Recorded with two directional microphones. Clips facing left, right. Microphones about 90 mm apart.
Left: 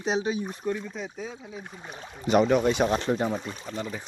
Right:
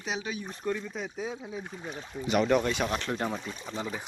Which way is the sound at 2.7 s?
25° left (ahead or behind).